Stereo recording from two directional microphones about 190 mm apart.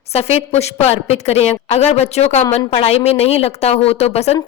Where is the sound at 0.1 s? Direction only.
35° left (ahead or behind).